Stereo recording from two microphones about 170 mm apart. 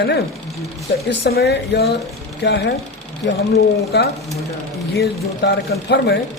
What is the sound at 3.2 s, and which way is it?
Speech, 70° left (ahead or behind).